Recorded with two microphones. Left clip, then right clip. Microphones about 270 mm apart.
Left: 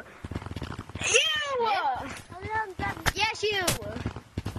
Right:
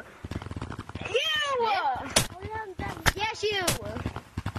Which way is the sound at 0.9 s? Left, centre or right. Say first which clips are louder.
Left 3 dB; centre.